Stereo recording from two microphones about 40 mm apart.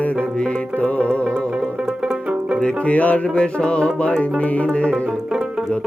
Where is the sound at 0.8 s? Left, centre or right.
Left.